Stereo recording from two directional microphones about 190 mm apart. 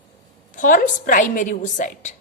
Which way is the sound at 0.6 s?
45° left (ahead or behind).